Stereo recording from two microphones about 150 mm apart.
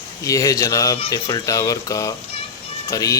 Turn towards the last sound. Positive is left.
turn(degrees=20)  # may be behind; listen again after turning